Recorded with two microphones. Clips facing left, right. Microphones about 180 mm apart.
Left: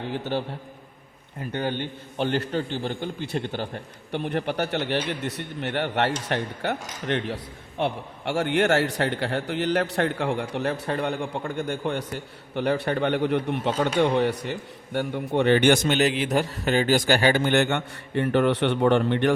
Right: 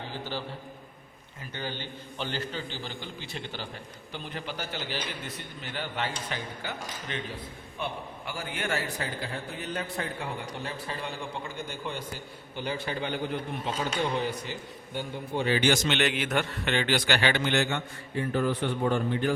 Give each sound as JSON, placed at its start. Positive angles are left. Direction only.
{"t": 0.1, "sound": "a man's voice", "side_deg": 60}
{"t": 16.0, "sound": "a man's voice", "side_deg": 35}